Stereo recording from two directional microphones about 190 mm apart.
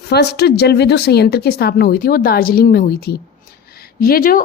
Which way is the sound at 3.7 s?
50° left (ahead or behind).